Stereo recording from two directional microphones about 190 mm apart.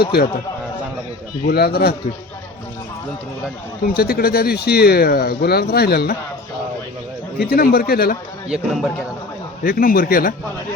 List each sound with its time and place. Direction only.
0.0 s a man's voice: 55° left (ahead or behind)
1.5 s a man's voice: 55° left (ahead or behind)
3.8 s speech: 50° left (ahead or behind)
7.3 s speech: 55° left (ahead or behind)
8.4 s speech: centre (ahead or behind)
9.6 s speech: 50° left (ahead or behind)